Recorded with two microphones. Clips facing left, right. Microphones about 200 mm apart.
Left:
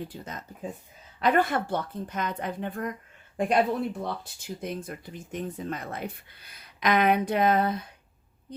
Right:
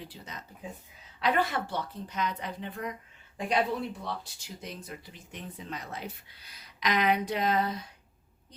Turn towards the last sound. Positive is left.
turn(degrees=55)  # may be behind; listen again after turning